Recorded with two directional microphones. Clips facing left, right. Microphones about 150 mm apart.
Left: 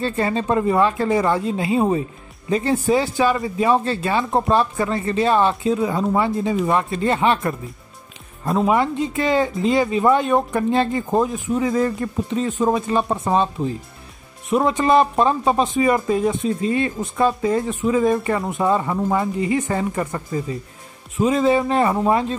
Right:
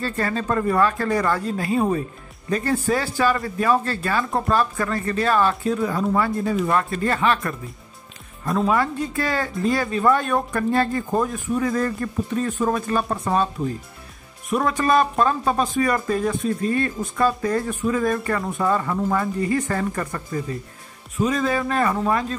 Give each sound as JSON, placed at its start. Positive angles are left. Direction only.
{"t": 0.0, "sound": "speech", "side_deg": 25}
{"t": 14.5, "sound": "speech", "side_deg": 25}